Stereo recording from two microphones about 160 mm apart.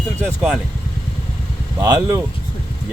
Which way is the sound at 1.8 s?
20° right (ahead or behind).